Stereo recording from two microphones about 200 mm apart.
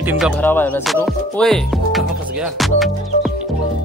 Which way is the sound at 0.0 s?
10° right (ahead or behind).